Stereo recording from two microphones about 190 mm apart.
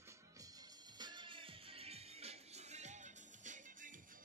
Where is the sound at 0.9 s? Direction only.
25° right (ahead or behind).